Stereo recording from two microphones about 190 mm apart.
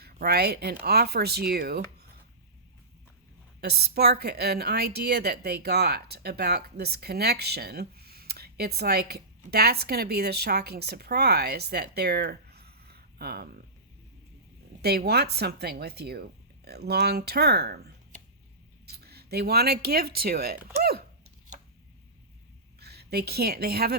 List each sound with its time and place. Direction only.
0.0 s a woman's voice: 55° right (ahead or behind)
3.6 s a woman's voice: 60° right (ahead or behind)
14.8 s a woman's voice: 55° right (ahead or behind)
18.9 s speech: 55° right (ahead or behind)
22.8 s a woman's voice: 55° right (ahead or behind)